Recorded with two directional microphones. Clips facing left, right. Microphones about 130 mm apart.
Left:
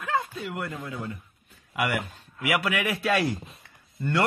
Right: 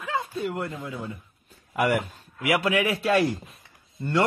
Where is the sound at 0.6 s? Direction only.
20° right (ahead or behind).